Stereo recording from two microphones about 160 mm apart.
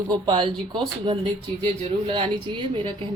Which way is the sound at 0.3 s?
30° right (ahead or behind).